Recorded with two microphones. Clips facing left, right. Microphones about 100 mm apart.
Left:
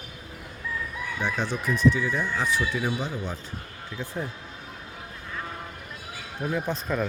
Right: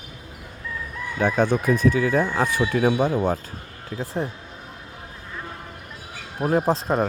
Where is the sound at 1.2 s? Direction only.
50° right (ahead or behind).